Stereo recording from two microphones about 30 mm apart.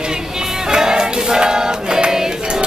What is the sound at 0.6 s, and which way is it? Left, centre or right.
Music, right.